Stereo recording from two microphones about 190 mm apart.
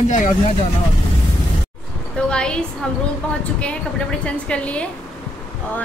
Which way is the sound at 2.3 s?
5° left (ahead or behind).